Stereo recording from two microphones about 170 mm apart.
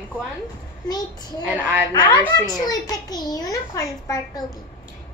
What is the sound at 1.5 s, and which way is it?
Speech, 10° right (ahead or behind).